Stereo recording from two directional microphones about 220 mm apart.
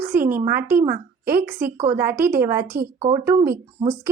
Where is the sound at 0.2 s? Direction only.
40° right (ahead or behind).